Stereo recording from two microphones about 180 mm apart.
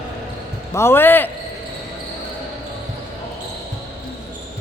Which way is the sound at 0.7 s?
15° left (ahead or behind).